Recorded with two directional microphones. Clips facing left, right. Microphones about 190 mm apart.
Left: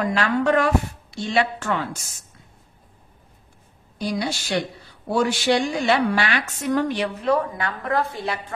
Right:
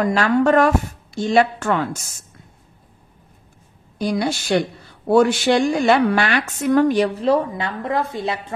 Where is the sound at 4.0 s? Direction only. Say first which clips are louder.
Right 5 dB; 50° right (ahead or behind); by 8.5 s 20° right (ahead or behind).